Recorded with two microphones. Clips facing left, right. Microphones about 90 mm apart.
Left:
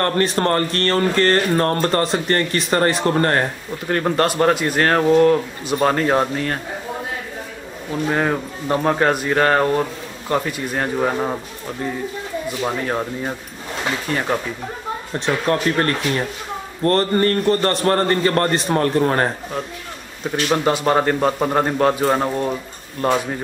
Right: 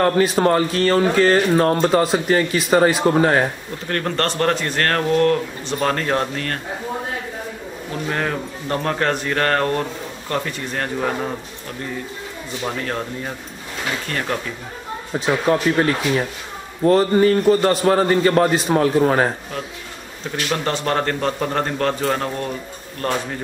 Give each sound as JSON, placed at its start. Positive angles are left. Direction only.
{"t": 0.0, "sound": "speech", "side_deg": -5}
{"t": 3.9, "sound": "speech", "side_deg": 10}
{"t": 8.1, "sound": "speech", "side_deg": 10}
{"t": 12.6, "sound": "speech", "side_deg": 15}
{"t": 15.1, "sound": "speech", "side_deg": -5}
{"t": 20.4, "sound": "speech", "side_deg": 10}